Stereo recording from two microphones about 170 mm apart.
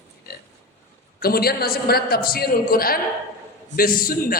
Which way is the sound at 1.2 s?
65° left (ahead or behind).